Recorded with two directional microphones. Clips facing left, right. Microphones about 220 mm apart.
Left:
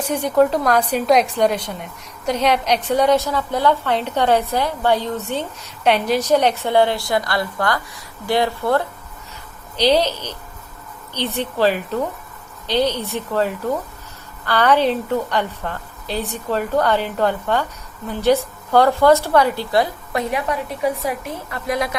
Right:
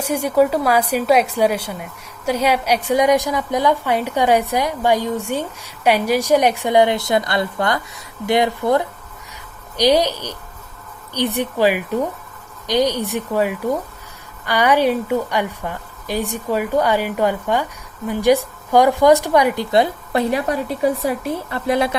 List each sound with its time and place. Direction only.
0.0 s a woman's voice: 10° right (ahead or behind)
20.3 s a woman's voice: 35° right (ahead or behind)